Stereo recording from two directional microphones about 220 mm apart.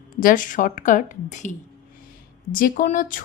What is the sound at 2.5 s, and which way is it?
Speech, 40° left (ahead or behind).